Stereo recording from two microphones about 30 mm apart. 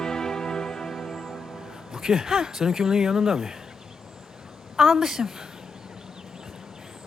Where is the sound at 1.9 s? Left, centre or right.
Centre.